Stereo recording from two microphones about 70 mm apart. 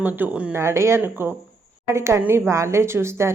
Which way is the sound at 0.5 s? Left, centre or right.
Right.